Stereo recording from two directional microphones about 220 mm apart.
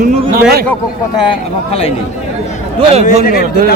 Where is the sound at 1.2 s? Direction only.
25° left (ahead or behind).